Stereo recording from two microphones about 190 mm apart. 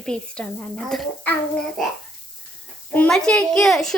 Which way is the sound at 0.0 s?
5° left (ahead or behind).